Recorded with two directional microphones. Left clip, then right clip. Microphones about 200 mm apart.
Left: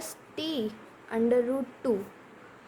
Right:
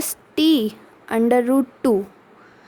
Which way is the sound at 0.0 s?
55° right (ahead or behind).